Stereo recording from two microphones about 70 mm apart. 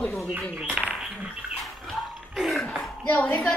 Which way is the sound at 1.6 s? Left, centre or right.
Centre.